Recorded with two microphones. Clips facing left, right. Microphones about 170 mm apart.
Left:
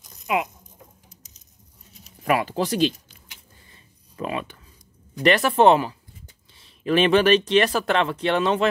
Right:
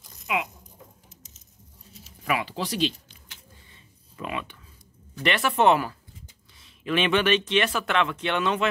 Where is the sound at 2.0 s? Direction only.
45° left (ahead or behind).